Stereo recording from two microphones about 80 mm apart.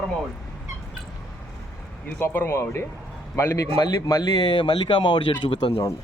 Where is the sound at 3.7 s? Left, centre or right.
Left.